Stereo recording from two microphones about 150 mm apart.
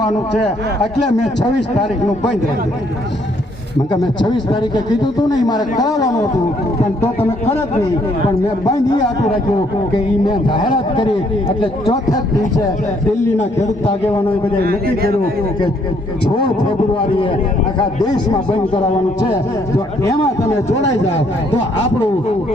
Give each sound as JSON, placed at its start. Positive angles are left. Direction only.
{"t": 4.2, "sound": "a man's voice", "side_deg": 30}
{"t": 8.6, "sound": "a man's voice", "side_deg": 25}
{"t": 10.2, "sound": "a man's voice", "side_deg": 30}
{"t": 13.4, "sound": "a man's voice", "side_deg": 50}
{"t": 14.6, "sound": "speech", "side_deg": -90}
{"t": 17.7, "sound": "a man's voice", "side_deg": 25}
{"t": 19.7, "sound": "a man's voice", "side_deg": 20}
{"t": 20.7, "sound": "a man's voice", "side_deg": 50}